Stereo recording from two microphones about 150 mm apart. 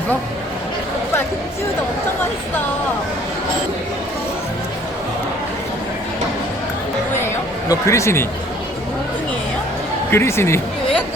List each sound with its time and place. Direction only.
7.7 s speech: 20° left (ahead or behind)
10.1 s speech: 15° left (ahead or behind)